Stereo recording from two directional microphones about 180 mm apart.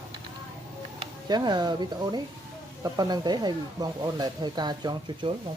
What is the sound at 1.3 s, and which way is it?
Speech, 25° right (ahead or behind).